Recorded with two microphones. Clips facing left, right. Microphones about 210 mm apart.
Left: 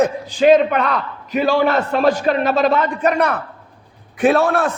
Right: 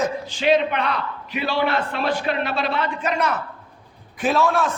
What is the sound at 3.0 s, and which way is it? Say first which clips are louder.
A man's voice: left 6 dB; 60° left (ahead or behind).